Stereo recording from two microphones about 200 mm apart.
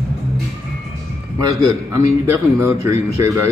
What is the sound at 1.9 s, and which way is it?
Speech, 15° right (ahead or behind).